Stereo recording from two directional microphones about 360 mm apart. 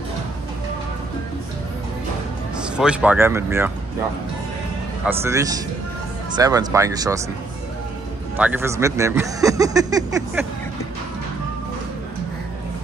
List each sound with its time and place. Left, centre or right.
2.6 s speech: centre
5.0 s speech: centre
8.4 s speech: centre